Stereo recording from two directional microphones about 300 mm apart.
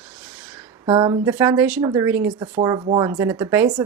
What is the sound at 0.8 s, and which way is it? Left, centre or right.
Speech, centre.